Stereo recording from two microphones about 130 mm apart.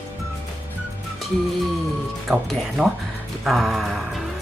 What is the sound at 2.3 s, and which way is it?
Speech, centre (ahead or behind).